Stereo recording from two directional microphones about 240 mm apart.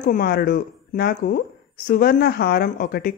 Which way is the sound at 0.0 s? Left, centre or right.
Left.